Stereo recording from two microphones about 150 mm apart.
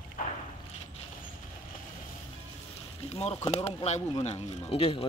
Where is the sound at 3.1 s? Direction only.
40° left (ahead or behind).